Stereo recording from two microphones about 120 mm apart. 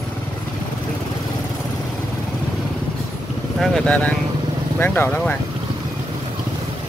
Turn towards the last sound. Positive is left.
turn(degrees=15)  # may be behind; listen again after turning